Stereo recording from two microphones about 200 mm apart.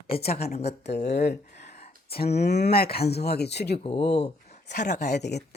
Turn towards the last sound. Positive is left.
turn(degrees=55)  # may be behind; listen again after turning